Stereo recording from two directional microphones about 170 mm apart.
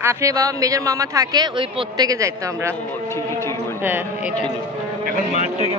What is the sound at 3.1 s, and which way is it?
Speech, 15° left (ahead or behind).